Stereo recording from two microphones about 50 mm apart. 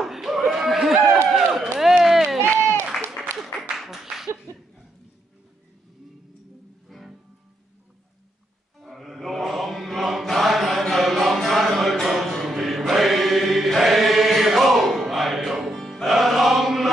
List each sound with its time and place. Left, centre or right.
0.0 s a sound: centre
1.3 s run: centre
2.4 s applause: right
3.7 s a sound: centre
6.9 s music: centre
8.7 s music: centre